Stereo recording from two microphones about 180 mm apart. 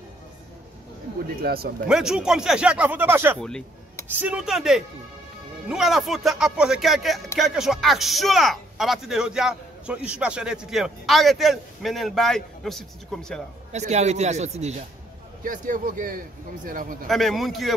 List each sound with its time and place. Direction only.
1.4 s speech: 60° right (ahead or behind)
1.9 s speech: 5° right (ahead or behind)
3.3 s speech: 5° left (ahead or behind)
13.7 s speech: 40° right (ahead or behind)
17.1 s speech: centre (ahead or behind)